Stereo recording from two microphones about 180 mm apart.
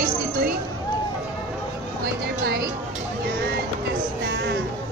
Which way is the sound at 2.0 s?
60° right (ahead or behind).